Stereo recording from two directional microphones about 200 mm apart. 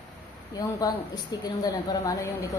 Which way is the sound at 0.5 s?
20° left (ahead or behind).